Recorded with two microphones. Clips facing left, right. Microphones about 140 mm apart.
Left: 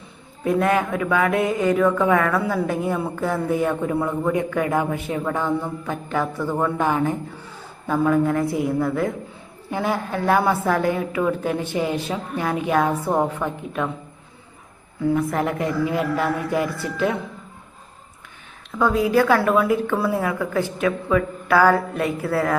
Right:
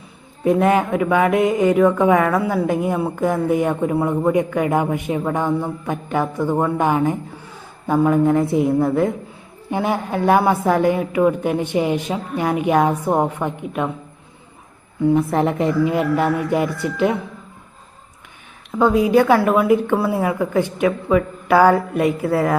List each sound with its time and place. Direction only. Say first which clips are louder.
0.4 s a woman's voice: right 4 dB; 20° right (ahead or behind)
15.0 s a woman's voice: right 4 dB; 25° right (ahead or behind)
18.7 s a woman's voice: right 4 dB; 20° right (ahead or behind)